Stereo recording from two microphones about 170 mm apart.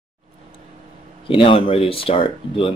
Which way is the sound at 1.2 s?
30° left (ahead or behind).